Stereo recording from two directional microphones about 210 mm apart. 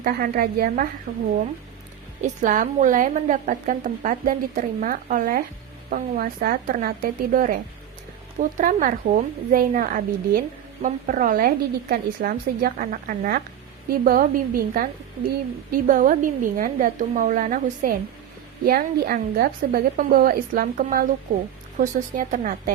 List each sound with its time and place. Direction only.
0.0 s a woman's voice: 45° right (ahead or behind)
2.2 s a woman's voice: 35° right (ahead or behind)